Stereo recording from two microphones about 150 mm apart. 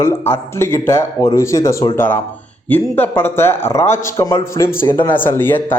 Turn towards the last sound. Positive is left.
turn(degrees=15)  # may be behind; listen again after turning